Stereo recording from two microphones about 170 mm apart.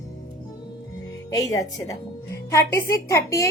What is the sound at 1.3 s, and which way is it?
A woman's voice, 20° left (ahead or behind).